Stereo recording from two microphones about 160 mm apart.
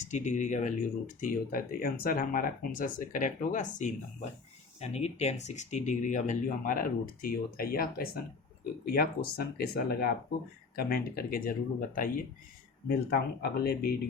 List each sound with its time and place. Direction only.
0.0 s speech: 50° left (ahead or behind)
12.9 s speech: 75° left (ahead or behind)